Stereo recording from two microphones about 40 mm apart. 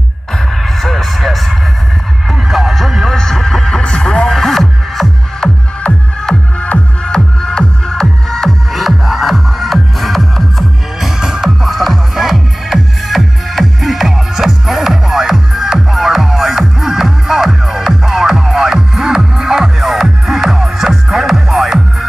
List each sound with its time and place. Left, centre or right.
0.8 s a sound: centre
2.4 s music: centre
4.4 s music: centre
7.1 s music: centre
8.7 s music: centre
11.0 s music: centre
11.6 s music: centre